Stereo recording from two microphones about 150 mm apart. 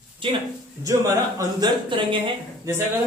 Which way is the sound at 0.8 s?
20° right (ahead or behind).